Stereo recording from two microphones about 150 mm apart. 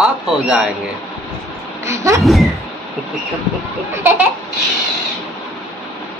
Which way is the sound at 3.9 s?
15° right (ahead or behind).